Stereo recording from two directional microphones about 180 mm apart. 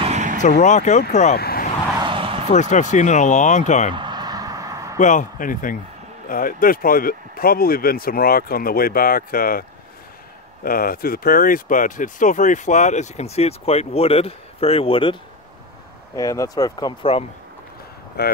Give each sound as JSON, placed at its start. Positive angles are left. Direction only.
{"t": 0.0, "sound": "vehicle", "side_deg": -40}
{"t": 0.4, "sound": "speech", "side_deg": 40}
{"t": 1.3, "sound": "vehicle", "side_deg": 60}
{"t": 2.0, "sound": "a sound", "side_deg": -30}
{"t": 2.5, "sound": "speech", "side_deg": 40}
{"t": 3.9, "sound": "a sound", "side_deg": -25}
{"t": 4.9, "sound": "speech", "side_deg": 45}
{"t": 16.2, "sound": "speech", "side_deg": 20}
{"t": 18.2, "sound": "speech", "side_deg": 60}